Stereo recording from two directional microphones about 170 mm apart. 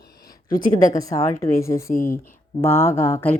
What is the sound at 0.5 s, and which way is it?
Speech, 55° left (ahead or behind).